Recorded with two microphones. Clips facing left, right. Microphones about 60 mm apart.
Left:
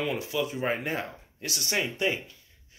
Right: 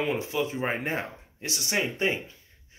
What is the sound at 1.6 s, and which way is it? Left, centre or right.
Speech, centre.